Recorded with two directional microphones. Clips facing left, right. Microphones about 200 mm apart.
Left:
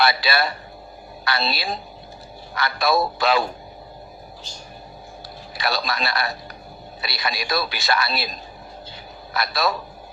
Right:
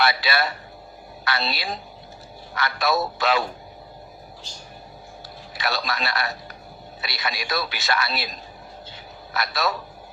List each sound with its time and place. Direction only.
0.0 s speech: 35° left (ahead or behind)
5.5 s speech: 35° left (ahead or behind)
9.3 s speech: 35° left (ahead or behind)